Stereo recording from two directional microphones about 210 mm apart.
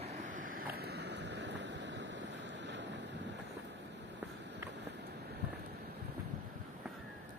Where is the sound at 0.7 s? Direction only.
50° right (ahead or behind).